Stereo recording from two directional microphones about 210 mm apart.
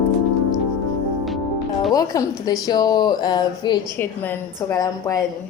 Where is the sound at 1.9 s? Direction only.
15° left (ahead or behind).